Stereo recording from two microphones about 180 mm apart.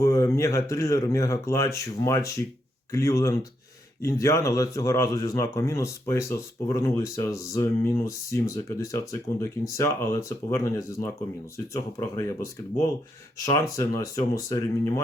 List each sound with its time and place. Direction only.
0.0 s speech: 15° left (ahead or behind)
13.4 s speech: 15° left (ahead or behind)